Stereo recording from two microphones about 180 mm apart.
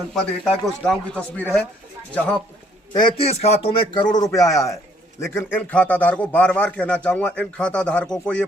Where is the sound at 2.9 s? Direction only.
25° left (ahead or behind).